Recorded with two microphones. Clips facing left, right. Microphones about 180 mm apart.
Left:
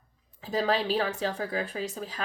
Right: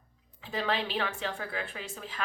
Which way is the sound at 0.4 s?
40° left (ahead or behind).